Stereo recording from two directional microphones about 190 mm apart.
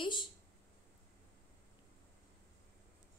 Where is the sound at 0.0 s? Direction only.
25° left (ahead or behind).